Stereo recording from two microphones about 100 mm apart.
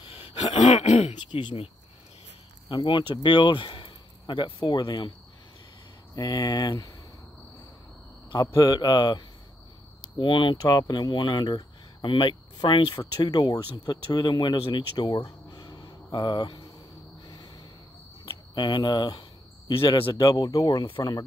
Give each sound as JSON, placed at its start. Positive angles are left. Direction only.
{"t": 0.0, "sound": "throat clearing", "side_deg": 75}
{"t": 1.4, "sound": "a man's voice", "side_deg": 60}
{"t": 2.7, "sound": "speech", "side_deg": 50}
{"t": 6.1, "sound": "speech", "side_deg": 45}
{"t": 8.5, "sound": "speech", "side_deg": 50}
{"t": 15.2, "sound": "a sound", "side_deg": 50}
{"t": 18.2, "sound": "speech", "side_deg": 50}
{"t": 19.7, "sound": "a man's voice", "side_deg": 60}
{"t": 20.2, "sound": "speech", "side_deg": 40}